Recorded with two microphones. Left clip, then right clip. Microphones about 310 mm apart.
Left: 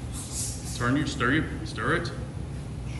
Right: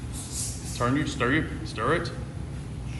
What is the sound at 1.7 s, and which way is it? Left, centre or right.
Speech, right.